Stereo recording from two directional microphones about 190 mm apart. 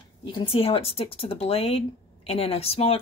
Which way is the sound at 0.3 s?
30° left (ahead or behind).